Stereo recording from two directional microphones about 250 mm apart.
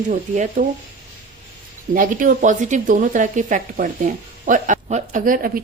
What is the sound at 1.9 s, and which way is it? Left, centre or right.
A woman's voice, right.